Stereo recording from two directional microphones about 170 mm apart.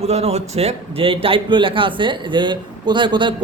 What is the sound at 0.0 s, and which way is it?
A man's voice, 35° right (ahead or behind).